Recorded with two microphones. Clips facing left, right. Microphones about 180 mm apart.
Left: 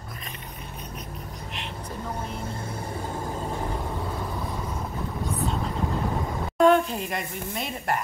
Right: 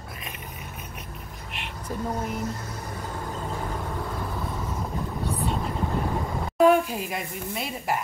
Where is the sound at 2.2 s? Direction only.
30° left (ahead or behind).